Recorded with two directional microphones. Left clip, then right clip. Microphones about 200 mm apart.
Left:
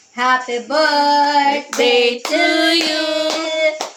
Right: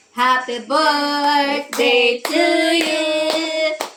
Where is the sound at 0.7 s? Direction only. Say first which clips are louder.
Left 3 dB; 30° left (ahead or behind).